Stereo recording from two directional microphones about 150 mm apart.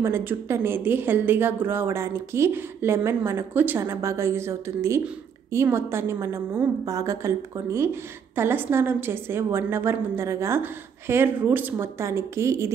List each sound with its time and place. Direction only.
0.0 s a woman's voice: 15° right (ahead or behind)